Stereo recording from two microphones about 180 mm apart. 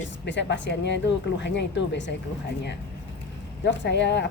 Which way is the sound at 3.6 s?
70° left (ahead or behind).